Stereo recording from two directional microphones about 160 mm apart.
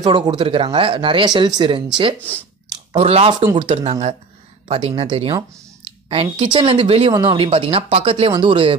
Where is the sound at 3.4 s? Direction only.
30° right (ahead or behind).